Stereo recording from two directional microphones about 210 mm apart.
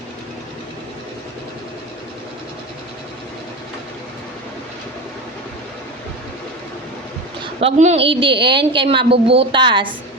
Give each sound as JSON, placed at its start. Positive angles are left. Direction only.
{"t": 7.6, "sound": "a woman's voice", "side_deg": -30}